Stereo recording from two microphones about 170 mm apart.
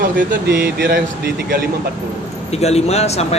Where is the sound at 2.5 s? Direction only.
40° left (ahead or behind).